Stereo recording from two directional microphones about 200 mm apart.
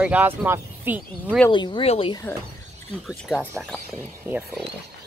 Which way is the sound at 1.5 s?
25° left (ahead or behind).